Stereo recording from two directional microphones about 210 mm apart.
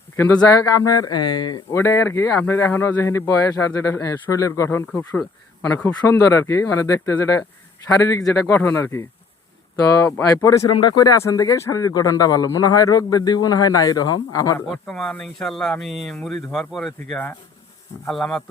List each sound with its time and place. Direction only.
0.2 s speech: 10° left (ahead or behind)
14.8 s speech: centre (ahead or behind)